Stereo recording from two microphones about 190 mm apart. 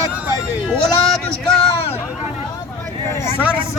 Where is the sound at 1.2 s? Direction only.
5° left (ahead or behind).